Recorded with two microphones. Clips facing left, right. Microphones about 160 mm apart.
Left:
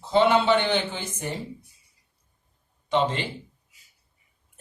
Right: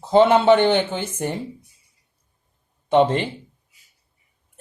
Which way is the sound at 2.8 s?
50° right (ahead or behind).